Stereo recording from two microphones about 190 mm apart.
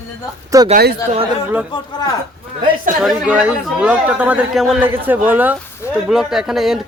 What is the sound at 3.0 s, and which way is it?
A man's voice, 5° right (ahead or behind).